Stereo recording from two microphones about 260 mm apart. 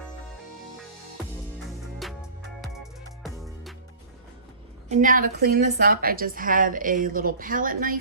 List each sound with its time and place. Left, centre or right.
2.0 s music: centre
3.2 s music: centre
4.9 s a woman's voice: right